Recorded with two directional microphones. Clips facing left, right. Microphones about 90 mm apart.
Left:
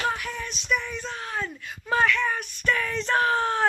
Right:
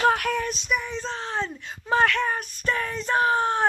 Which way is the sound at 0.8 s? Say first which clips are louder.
Right 3 dB; 30° right (ahead or behind).